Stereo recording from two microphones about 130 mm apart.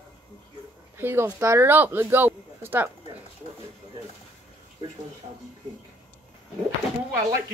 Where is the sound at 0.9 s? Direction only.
15° right (ahead or behind).